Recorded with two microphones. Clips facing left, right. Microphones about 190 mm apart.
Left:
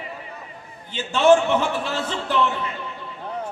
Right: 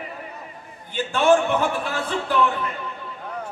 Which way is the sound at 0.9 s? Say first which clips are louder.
Left 2 dB; 55° right (ahead or behind).